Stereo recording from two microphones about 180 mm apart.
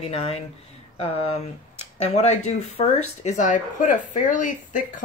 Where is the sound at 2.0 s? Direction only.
35° left (ahead or behind).